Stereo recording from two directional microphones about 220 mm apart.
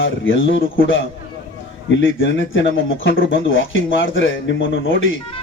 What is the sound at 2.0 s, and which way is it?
Speech, 60° left (ahead or behind).